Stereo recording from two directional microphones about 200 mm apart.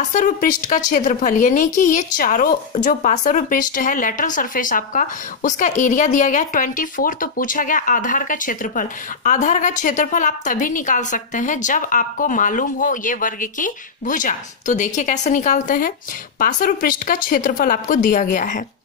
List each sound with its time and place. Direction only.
0.1 s a woman's voice: 40° left (ahead or behind)